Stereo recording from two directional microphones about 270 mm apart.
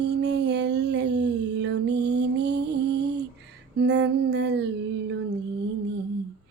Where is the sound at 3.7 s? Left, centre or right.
Right.